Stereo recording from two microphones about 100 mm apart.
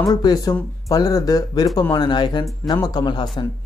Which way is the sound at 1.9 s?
50° left (ahead or behind).